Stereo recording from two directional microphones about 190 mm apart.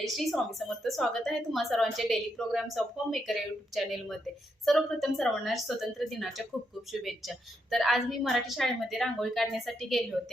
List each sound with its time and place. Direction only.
0.0 s a woman's voice: centre (ahead or behind)